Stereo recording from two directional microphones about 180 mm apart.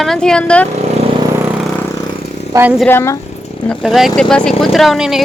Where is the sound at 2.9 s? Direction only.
10° left (ahead or behind).